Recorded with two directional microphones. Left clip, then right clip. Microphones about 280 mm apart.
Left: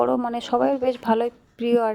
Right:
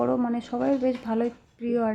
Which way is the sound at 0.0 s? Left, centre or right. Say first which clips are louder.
Left 4 dB; left.